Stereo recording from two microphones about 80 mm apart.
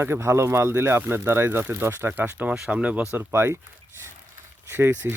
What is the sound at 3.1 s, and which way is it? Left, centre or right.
Speech, right.